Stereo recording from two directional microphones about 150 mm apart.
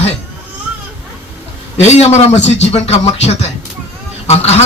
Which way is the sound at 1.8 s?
45° left (ahead or behind).